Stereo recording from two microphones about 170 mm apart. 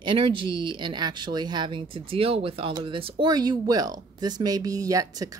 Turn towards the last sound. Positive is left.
turn(degrees=-20)  # may be behind; listen again after turning